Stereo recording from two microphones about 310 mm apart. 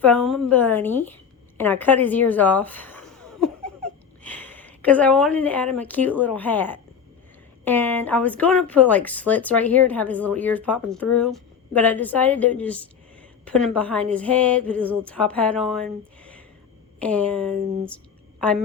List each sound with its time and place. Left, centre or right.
0.0 s a woman's voice: centre